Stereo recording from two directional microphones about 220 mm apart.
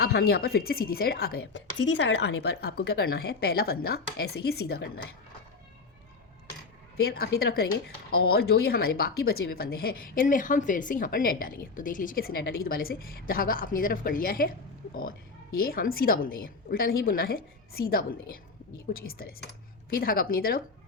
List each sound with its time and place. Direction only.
0.0 s speech: 45° left (ahead or behind)
6.9 s speech: 45° left (ahead or behind)
15.5 s a woman's voice: 40° left (ahead or behind)